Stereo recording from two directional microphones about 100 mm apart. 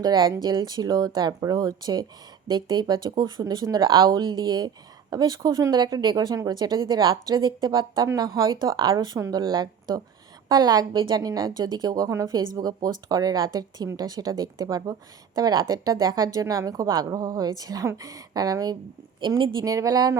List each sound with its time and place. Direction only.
0.0 s a woman's voice: 40° right (ahead or behind)
8.5 s a woman's voice: 50° right (ahead or behind)
19.3 s a woman's voice: 55° right (ahead or behind)
19.6 s speech: 35° right (ahead or behind)